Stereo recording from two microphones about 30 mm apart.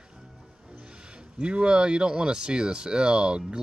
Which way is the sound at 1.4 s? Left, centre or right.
Right.